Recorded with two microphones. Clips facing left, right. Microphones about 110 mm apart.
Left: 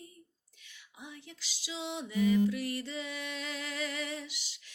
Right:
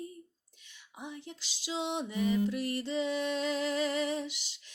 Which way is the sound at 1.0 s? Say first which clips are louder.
Right 5 dB; 25° right (ahead or behind).